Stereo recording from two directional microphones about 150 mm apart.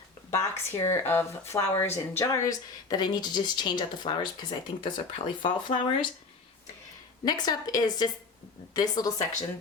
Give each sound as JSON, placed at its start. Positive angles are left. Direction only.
{"t": 0.3, "sound": "a woman's voice", "side_deg": 20}
{"t": 7.3, "sound": "a woman's voice", "side_deg": 25}